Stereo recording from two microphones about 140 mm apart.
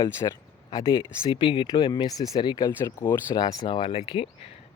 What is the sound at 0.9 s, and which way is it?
Speech, 35° left (ahead or behind).